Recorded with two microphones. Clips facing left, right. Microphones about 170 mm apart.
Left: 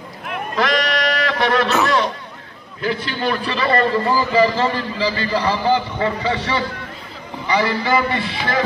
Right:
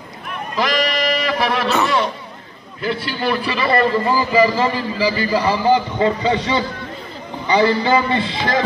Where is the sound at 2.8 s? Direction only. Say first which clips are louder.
Even; 5° right (ahead or behind).